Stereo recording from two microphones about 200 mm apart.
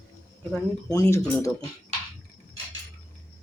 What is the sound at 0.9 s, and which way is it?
Speech, 15° left (ahead or behind).